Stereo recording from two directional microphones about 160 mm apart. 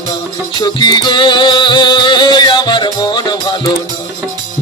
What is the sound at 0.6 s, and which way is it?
Music, 25° left (ahead or behind).